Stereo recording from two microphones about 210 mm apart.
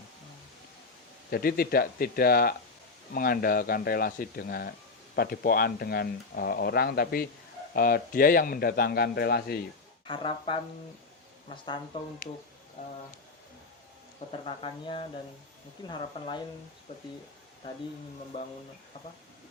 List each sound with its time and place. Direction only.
1.3 s speech: 45° left (ahead or behind)
10.1 s speech: 25° left (ahead or behind)
14.4 s speech: 25° left (ahead or behind)
18.3 s speech: 25° left (ahead or behind)